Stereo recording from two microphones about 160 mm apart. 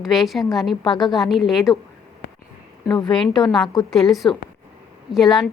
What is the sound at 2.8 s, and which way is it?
Speech, 25° left (ahead or behind).